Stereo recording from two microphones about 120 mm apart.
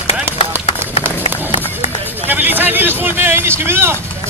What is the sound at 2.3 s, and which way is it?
Speech, 15° right (ahead or behind).